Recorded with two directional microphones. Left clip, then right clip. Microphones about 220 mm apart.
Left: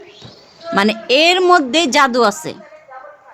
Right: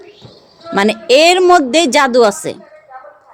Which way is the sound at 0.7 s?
5° left (ahead or behind).